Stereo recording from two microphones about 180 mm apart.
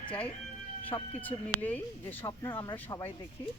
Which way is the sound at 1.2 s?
10° left (ahead or behind).